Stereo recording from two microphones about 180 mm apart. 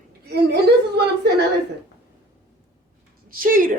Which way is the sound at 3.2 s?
50° right (ahead or behind).